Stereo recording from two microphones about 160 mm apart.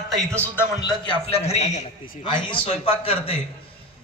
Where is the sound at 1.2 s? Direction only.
40° left (ahead or behind).